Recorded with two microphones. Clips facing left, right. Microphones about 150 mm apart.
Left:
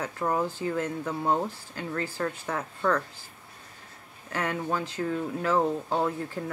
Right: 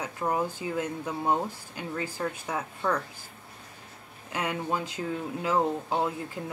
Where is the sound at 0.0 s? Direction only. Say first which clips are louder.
Left 1 dB; 15° right (ahead or behind).